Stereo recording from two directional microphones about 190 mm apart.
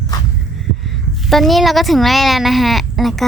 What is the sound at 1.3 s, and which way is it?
Speech, centre (ahead or behind).